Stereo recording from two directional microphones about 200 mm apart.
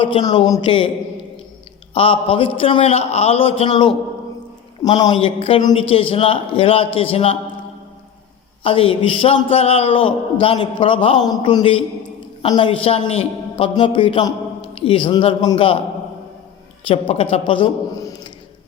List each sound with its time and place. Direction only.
0.0 s a man's voice: 25° left (ahead or behind)
1.9 s a man's voice: 25° left (ahead or behind)
8.6 s a man's voice: 25° left (ahead or behind)
16.8 s a man's voice: 30° left (ahead or behind)